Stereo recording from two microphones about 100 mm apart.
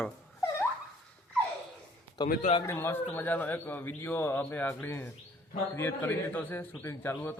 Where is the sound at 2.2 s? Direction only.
50° left (ahead or behind).